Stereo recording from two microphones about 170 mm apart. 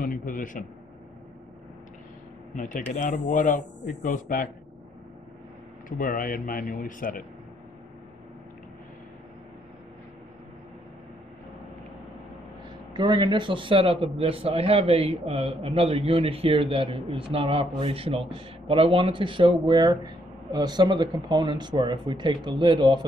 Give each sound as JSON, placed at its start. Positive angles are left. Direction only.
{"t": 0.0, "sound": "speech", "side_deg": 55}
{"t": 2.5, "sound": "speech", "side_deg": 50}
{"t": 5.9, "sound": "speech", "side_deg": 55}
{"t": 12.9, "sound": "speech", "side_deg": -25}